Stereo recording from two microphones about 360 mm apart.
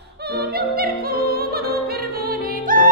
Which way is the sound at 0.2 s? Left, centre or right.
Right.